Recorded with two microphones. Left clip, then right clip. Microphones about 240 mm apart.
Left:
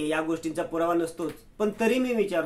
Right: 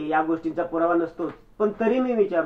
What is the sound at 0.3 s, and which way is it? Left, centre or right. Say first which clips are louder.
Speech: right 4 dB; left.